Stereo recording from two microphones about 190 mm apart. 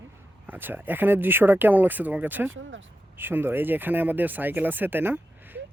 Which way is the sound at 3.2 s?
10° right (ahead or behind).